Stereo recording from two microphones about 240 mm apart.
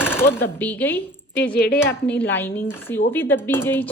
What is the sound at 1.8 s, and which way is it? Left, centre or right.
A woman's voice, centre.